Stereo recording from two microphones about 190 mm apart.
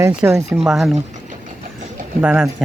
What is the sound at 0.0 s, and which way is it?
Speech, 10° right (ahead or behind).